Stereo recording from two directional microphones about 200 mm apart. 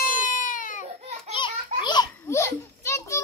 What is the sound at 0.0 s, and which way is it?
Baby cry, 40° left (ahead or behind).